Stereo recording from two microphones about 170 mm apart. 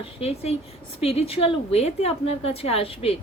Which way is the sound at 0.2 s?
35° left (ahead or behind).